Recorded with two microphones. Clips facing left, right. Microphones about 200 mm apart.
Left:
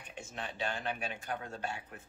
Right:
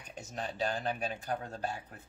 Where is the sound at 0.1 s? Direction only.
40° right (ahead or behind).